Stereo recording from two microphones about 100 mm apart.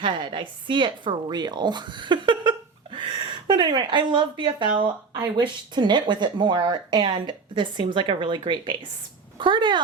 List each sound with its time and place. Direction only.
0.0 s a woman's voice: 55° right (ahead or behind)